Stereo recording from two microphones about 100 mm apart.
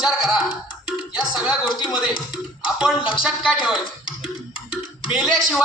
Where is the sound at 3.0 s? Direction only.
55° left (ahead or behind).